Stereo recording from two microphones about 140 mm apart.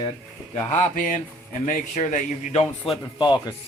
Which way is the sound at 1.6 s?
65° left (ahead or behind).